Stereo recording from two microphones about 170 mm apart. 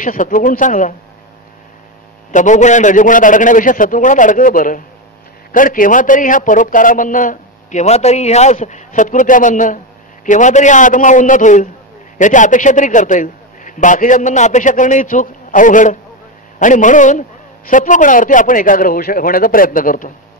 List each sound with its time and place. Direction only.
0.0 s a man's voice: 50° left (ahead or behind)
2.3 s a man's voice: 45° left (ahead or behind)